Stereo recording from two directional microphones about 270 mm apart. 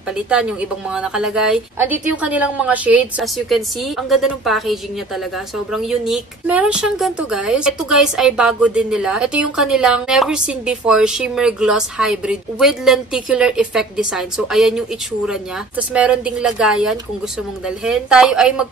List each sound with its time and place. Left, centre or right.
0.3 s speech: centre